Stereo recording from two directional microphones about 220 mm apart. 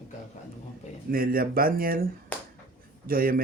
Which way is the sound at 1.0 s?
40° right (ahead or behind).